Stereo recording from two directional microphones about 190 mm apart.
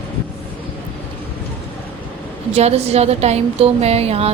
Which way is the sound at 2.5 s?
35° right (ahead or behind).